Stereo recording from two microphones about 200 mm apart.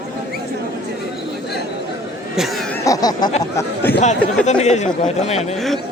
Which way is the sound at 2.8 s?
20° left (ahead or behind).